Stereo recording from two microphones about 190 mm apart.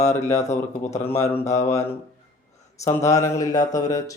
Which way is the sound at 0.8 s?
35° left (ahead or behind).